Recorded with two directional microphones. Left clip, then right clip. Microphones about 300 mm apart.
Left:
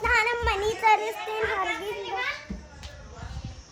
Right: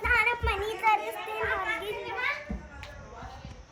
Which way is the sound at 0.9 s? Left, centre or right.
Left.